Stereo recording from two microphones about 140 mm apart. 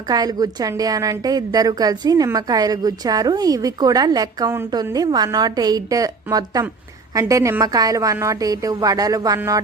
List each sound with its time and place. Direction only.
0.1 s a woman's voice: 30° right (ahead or behind)